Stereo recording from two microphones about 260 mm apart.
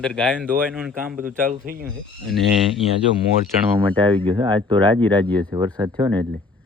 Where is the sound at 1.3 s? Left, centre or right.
Right.